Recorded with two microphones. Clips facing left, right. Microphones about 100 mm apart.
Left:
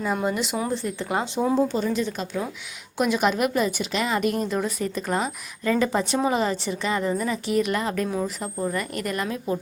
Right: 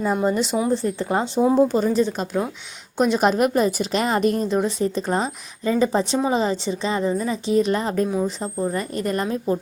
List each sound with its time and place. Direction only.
0.3 s a woman's voice: 35° right (ahead or behind)